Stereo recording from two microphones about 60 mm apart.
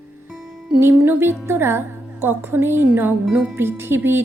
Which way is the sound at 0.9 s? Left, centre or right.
Right.